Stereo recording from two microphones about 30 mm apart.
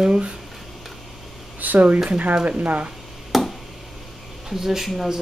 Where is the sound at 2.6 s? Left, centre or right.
Right.